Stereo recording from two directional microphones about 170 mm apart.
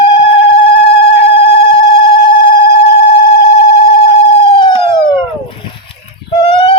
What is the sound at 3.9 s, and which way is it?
Emergency vehicle, 30° left (ahead or behind).